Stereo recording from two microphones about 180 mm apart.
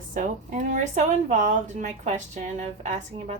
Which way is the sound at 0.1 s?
45° right (ahead or behind).